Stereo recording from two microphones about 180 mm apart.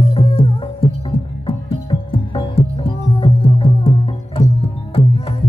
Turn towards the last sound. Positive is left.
turn(degrees=35)  # may be behind; listen again after turning